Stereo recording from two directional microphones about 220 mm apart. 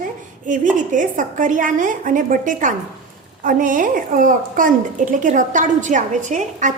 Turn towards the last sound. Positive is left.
turn(degrees=-35)  # may be behind; listen again after turning